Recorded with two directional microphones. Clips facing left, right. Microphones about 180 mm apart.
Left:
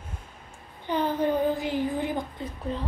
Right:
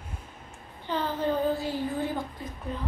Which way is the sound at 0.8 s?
15° left (ahead or behind).